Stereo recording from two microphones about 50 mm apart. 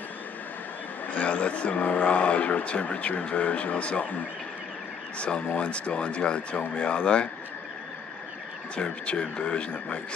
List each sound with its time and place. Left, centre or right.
1.0 s speech: left
5.5 s speech: left
8.7 s speech: left